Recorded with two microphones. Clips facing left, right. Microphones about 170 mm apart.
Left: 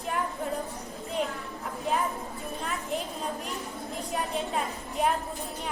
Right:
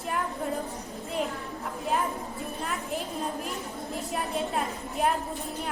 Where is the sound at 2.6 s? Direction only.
Centre (ahead or behind).